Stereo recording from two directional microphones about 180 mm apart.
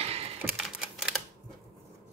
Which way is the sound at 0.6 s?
Centre (ahead or behind).